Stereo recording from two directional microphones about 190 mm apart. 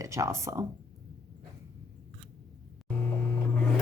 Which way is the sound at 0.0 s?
15° right (ahead or behind).